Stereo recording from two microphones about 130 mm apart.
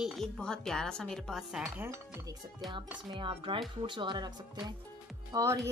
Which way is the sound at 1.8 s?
20° right (ahead or behind).